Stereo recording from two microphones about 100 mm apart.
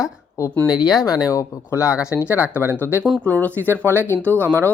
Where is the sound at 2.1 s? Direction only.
15° right (ahead or behind).